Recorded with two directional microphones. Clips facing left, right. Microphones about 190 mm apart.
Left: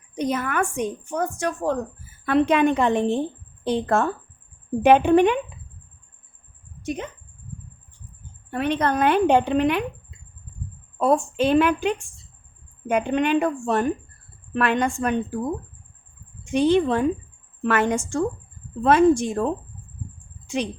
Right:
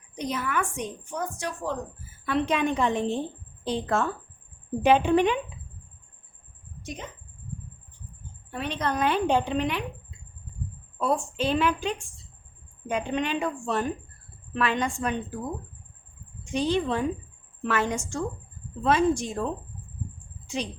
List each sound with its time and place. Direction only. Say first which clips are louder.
0.2 s a woman's voice: left 5 dB; 50° left (ahead or behind)
6.8 s speech: left 9 dB; 60° left (ahead or behind)
8.4 s a woman's voice: left 7 dB; 60° left (ahead or behind)
11.0 s a woman's voice: left 6 dB; 55° left (ahead or behind)
16.5 s a woman's voice: left 7 dB; 60° left (ahead or behind)